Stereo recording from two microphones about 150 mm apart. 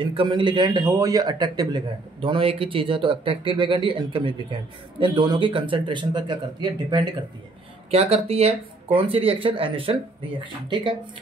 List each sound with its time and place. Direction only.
0.0 s a man's voice: 35° right (ahead or behind)
7.9 s a man's voice: 40° right (ahead or behind)